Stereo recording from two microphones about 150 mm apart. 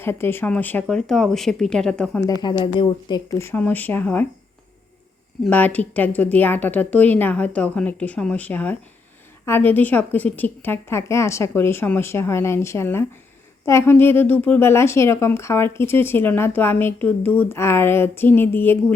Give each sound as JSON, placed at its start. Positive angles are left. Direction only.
{"t": 0.0, "sound": "speech", "side_deg": 15}
{"t": 2.2, "sound": "speech", "side_deg": 30}
{"t": 3.3, "sound": "speech", "side_deg": 15}
{"t": 5.5, "sound": "speech", "side_deg": 10}